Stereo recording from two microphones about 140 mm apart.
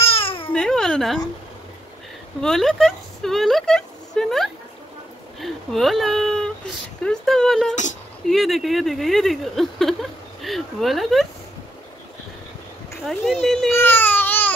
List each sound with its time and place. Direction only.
0.0 s babbling: 40° left (ahead or behind)
0.5 s babbling: 5° left (ahead or behind)
2.4 s speech: centre (ahead or behind)
13.0 s speech: 5° right (ahead or behind)
13.7 s baby cry: 15° left (ahead or behind)